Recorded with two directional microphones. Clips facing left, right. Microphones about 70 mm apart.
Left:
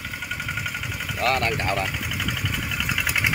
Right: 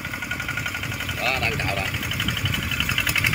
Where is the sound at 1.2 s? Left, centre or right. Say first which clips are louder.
Left 3 dB; left.